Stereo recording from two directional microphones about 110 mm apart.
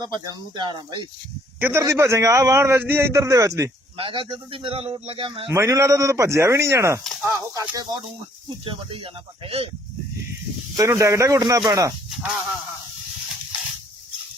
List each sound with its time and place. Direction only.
0.0 s speech: 40° right (ahead or behind)
1.5 s a man's voice: 20° right (ahead or behind)
3.9 s a man's voice: 55° right (ahead or behind)
5.5 s a man's voice: 30° right (ahead or behind)
7.0 s speech: centre (ahead or behind)
7.3 s a man's voice: 30° right (ahead or behind)
8.6 s speech: 55° right (ahead or behind)
10.8 s a man's voice: 30° right (ahead or behind)
12.2 s speech: 10° right (ahead or behind)
13.5 s a sound: 5° right (ahead or behind)